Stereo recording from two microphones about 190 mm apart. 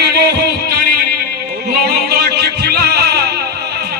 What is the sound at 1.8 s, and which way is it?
Music, 55° right (ahead or behind).